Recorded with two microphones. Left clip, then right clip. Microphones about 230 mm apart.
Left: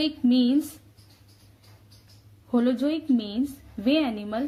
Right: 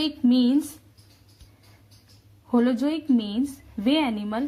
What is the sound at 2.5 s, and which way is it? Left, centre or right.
A woman's voice, right.